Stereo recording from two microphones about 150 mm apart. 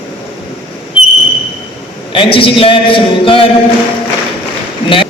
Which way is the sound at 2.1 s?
35° left (ahead or behind).